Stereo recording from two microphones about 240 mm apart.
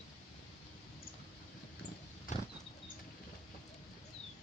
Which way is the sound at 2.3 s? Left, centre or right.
Left.